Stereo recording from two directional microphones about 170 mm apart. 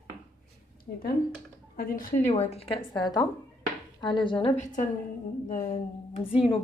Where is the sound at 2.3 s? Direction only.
35° left (ahead or behind).